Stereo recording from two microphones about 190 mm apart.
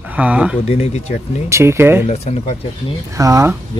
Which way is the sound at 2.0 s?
35° left (ahead or behind).